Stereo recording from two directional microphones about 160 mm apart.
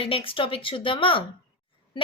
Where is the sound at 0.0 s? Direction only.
35° left (ahead or behind).